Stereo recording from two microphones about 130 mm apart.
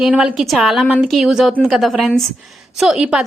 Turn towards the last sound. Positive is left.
turn(degrees=-5)  # may be behind; listen again after turning